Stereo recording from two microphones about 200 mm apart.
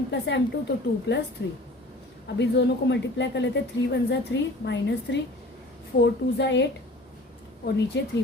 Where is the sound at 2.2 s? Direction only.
60° left (ahead or behind).